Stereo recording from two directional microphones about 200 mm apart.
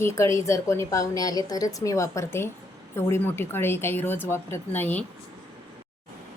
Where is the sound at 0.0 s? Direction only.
15° left (ahead or behind).